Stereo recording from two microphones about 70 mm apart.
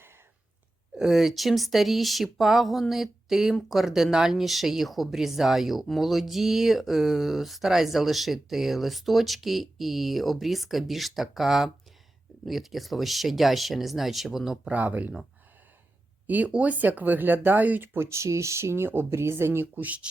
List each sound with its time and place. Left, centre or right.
0.9 s speech: centre
14.7 s speech: right
16.2 s speech: right
19.7 s speech: right